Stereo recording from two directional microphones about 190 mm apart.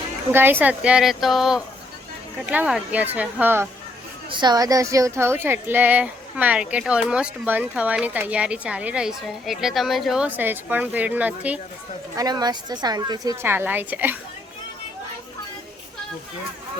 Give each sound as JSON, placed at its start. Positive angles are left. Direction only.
{"t": 0.6, "sound": "speech", "side_deg": -5}
{"t": 4.3, "sound": "speech", "side_deg": -25}
{"t": 12.1, "sound": "a woman's voice", "side_deg": -20}